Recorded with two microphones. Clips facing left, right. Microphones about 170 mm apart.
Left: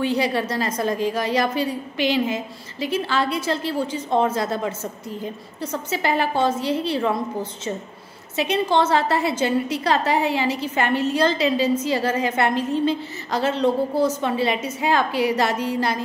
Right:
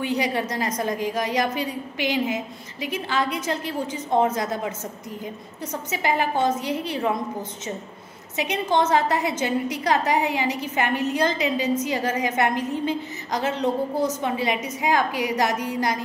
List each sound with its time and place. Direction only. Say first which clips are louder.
0.0 s a woman's voice: left 3 dB; 15° right (ahead or behind)
5.9 s a woman's voice: left 1 dB; 15° right (ahead or behind)
8.4 s a woman's voice: left 3 dB; 15° right (ahead or behind)